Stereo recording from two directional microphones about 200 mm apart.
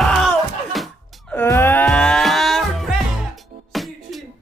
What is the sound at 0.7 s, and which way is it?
Music, centre (ahead or behind).